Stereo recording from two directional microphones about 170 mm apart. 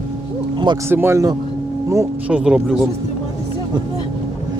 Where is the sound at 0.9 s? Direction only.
15° right (ahead or behind).